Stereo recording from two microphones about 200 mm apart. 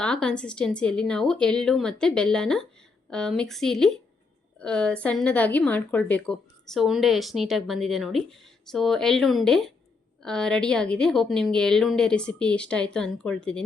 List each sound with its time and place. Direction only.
0.0 s a woman's voice: 5° left (ahead or behind)